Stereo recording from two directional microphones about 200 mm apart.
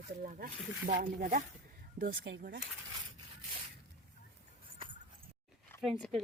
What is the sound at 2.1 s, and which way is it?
Speech, 65° right (ahead or behind).